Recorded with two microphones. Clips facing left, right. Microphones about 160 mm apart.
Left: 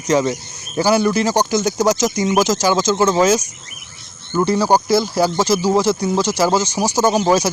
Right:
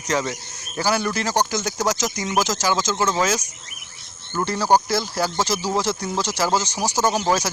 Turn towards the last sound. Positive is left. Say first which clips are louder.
# left 6 dB
turn(degrees=15)  # may be behind; listen again after turning